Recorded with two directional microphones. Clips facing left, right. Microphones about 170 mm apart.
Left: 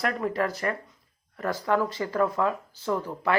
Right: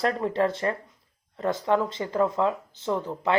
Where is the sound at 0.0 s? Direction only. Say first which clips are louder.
Right 3 dB; 30° right (ahead or behind).